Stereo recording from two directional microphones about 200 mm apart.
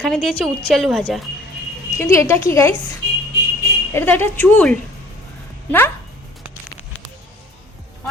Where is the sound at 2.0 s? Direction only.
15° left (ahead or behind).